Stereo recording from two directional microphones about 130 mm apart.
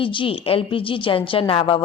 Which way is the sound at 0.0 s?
40° left (ahead or behind).